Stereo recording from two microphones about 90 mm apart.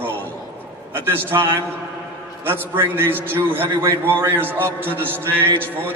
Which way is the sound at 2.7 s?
25° right (ahead or behind).